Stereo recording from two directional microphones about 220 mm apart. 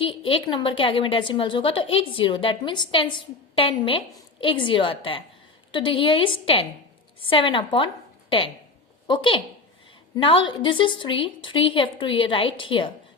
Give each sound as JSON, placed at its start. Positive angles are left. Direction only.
{"t": 0.0, "sound": "a woman's voice", "side_deg": 25}
{"t": 9.0, "sound": "a woman's voice", "side_deg": 25}